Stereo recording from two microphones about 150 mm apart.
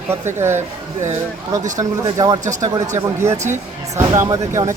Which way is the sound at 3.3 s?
55° right (ahead or behind).